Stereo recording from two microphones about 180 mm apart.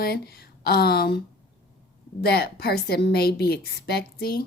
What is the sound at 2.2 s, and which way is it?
Speech, 60° left (ahead or behind).